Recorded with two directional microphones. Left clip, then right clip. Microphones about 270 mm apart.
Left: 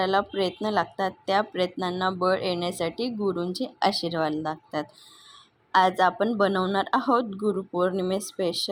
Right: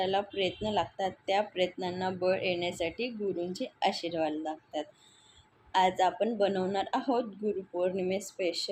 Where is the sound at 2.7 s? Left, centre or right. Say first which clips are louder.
Left 5 dB; centre.